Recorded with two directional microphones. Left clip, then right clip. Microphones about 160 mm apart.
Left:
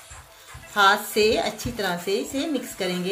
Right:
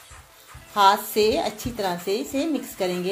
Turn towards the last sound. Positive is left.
turn(degrees=-10)  # may be behind; listen again after turning